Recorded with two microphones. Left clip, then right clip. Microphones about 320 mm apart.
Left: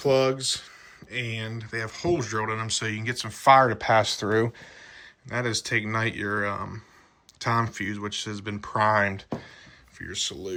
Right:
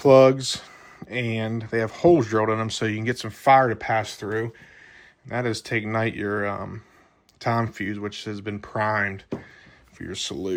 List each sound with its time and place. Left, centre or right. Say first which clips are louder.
0.0 s speech: right 8 dB; centre
5.3 s speech: right 1 dB; centre
10.0 s speech: right 1 dB; centre